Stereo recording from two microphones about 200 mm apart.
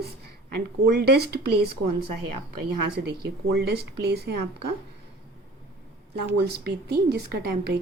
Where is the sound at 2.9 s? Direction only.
55° right (ahead or behind).